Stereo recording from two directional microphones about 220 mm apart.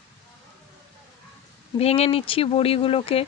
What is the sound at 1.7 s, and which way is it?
A woman's voice, 25° left (ahead or behind).